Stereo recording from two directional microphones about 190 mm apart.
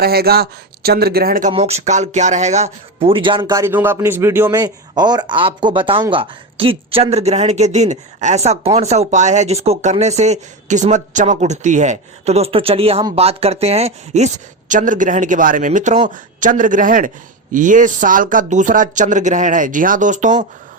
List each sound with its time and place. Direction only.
0.0 s speech: 55° right (ahead or behind)
1.5 s speech: 35° right (ahead or behind)